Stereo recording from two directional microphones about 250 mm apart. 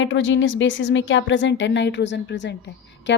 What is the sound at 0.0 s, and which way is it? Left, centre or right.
A woman's voice, left.